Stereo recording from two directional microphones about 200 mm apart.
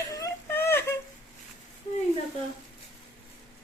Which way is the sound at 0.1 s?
15° left (ahead or behind).